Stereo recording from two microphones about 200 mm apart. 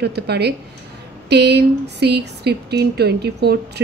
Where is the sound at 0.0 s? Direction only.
55° right (ahead or behind).